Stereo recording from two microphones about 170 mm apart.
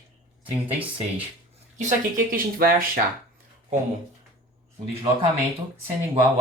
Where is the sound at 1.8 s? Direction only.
50° right (ahead or behind).